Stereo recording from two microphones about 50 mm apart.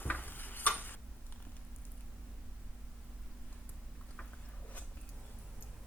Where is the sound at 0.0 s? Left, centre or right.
Left.